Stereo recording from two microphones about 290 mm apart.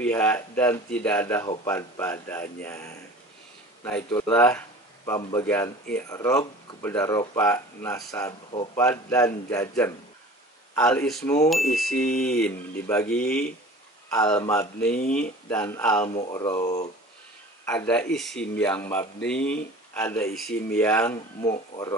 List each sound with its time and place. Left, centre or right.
0.0 s speech: centre
14.9 s speech: left
15.5 s speech: centre
16.1 s speech: left
17.6 s speech: centre